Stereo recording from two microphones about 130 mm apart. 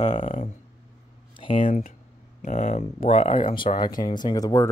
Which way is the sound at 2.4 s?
65° left (ahead or behind).